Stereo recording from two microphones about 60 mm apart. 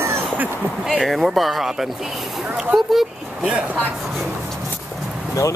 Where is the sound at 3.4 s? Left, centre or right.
Centre.